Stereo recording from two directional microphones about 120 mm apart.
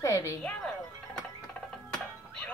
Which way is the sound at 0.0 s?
25° left (ahead or behind).